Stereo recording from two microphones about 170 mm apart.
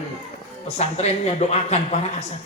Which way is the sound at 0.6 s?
40° left (ahead or behind).